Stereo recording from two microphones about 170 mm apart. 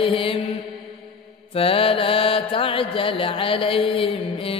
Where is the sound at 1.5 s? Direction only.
35° left (ahead or behind).